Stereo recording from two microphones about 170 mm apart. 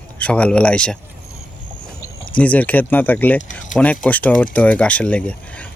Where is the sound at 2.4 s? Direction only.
10° left (ahead or behind).